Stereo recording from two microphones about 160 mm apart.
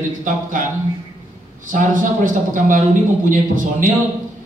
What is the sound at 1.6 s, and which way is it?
A man's voice, 55° right (ahead or behind).